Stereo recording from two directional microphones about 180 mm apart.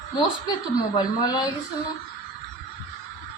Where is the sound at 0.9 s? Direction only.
20° left (ahead or behind).